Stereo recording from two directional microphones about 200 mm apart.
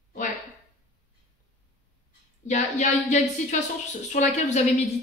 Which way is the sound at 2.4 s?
35° left (ahead or behind).